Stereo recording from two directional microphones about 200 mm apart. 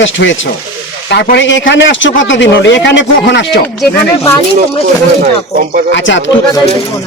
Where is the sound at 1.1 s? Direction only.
60° left (ahead or behind).